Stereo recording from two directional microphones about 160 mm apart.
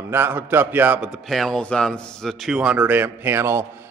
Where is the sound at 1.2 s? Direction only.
Centre (ahead or behind).